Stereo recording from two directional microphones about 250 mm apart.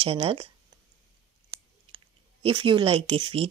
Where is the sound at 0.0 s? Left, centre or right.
Right.